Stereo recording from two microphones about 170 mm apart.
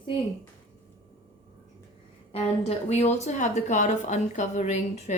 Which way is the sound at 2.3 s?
35° left (ahead or behind).